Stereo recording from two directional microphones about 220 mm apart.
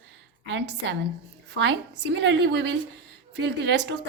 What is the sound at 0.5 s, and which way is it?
Speech, 55° right (ahead or behind).